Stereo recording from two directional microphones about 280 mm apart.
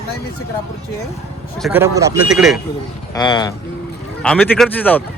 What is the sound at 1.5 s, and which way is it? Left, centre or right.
Speech, centre.